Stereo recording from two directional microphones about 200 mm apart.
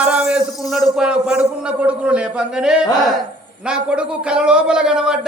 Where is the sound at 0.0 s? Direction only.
5° right (ahead or behind).